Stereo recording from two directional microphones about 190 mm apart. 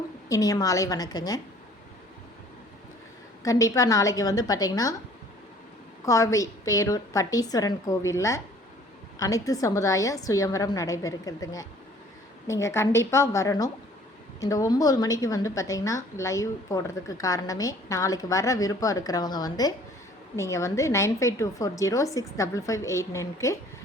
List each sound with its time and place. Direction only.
0.3 s a woman's voice: 20° left (ahead or behind)
3.4 s a woman's voice: 20° left (ahead or behind)
6.1 s a woman's voice: 15° left (ahead or behind)